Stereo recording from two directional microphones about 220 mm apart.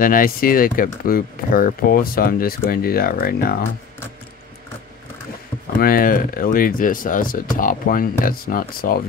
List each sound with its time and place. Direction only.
0.0 s speech: 40° left (ahead or behind)
5.8 s speech: 40° left (ahead or behind)